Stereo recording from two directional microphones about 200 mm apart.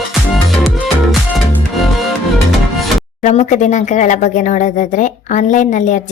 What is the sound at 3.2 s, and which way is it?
Speech, 35° left (ahead or behind).